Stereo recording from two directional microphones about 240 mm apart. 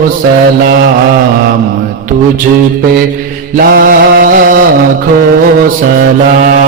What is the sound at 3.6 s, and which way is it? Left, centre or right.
Mantra, right.